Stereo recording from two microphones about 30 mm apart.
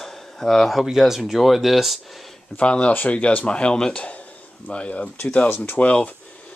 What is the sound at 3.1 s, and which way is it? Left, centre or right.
Speech, left.